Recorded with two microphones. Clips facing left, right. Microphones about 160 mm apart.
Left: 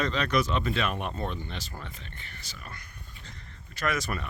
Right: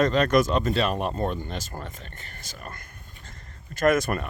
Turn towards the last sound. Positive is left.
turn(degrees=-50)  # may be behind; listen again after turning